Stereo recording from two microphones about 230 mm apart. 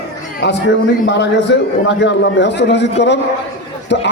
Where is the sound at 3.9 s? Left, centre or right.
Left.